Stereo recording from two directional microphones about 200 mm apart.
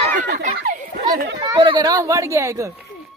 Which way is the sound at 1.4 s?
25° right (ahead or behind).